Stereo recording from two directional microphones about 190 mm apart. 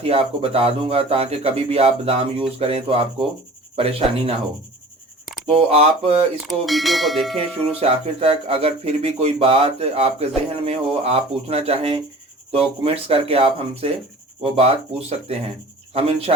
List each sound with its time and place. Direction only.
0.0 s speech: 30° right (ahead or behind)
5.5 s speech: 30° right (ahead or behind)
6.7 s bell: centre (ahead or behind)
7.8 s speech: 30° right (ahead or behind)